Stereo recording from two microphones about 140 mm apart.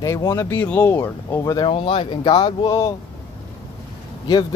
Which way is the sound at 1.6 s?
40° left (ahead or behind).